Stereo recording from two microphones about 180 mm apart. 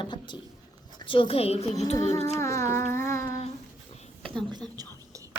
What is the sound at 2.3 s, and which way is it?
Music, 15° left (ahead or behind).